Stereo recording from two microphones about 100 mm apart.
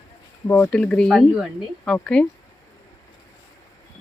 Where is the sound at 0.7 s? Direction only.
10° left (ahead or behind).